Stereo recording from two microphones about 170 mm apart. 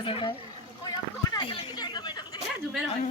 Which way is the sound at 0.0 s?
30° left (ahead or behind).